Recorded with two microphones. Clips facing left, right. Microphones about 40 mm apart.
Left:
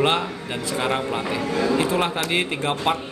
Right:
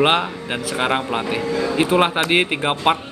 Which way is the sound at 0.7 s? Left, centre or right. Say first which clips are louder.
Right 3 dB; right.